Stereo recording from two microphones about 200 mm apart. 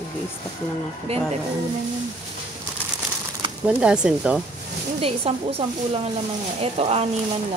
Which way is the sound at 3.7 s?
5° right (ahead or behind).